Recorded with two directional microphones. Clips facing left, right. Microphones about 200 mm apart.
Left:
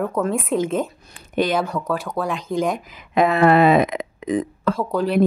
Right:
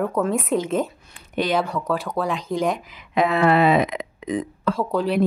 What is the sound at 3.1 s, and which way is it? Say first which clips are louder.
Speech: left 3 dB; 50° left (ahead or behind).